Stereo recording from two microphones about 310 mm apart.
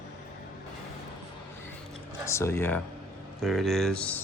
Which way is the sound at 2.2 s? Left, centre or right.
Centre.